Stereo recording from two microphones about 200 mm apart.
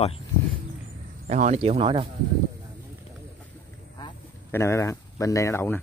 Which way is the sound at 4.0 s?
15° left (ahead or behind).